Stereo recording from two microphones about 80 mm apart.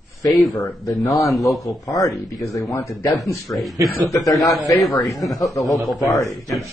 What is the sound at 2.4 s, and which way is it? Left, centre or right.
Speech, left.